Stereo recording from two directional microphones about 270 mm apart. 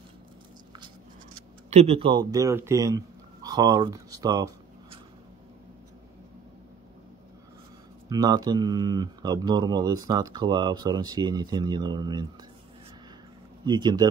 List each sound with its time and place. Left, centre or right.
1.7 s speech: right
8.1 s speech: centre
13.7 s speech: centre